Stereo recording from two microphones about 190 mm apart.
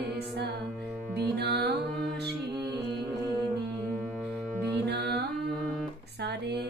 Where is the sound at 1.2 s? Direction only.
60° right (ahead or behind).